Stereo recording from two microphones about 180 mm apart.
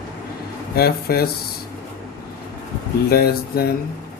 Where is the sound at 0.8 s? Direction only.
60° left (ahead or behind).